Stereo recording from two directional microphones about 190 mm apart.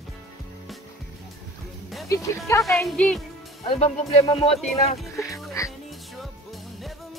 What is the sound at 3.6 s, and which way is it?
Speech, 35° left (ahead or behind).